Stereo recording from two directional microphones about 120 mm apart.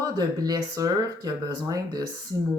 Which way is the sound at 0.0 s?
30° right (ahead or behind).